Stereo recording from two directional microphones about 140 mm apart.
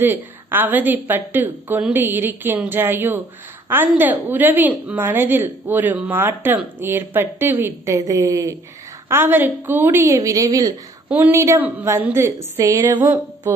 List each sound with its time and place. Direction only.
0.0 s a woman's voice: 15° right (ahead or behind)